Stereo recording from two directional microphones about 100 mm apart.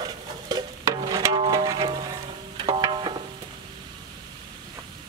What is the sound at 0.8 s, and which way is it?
Stir, 35° right (ahead or behind).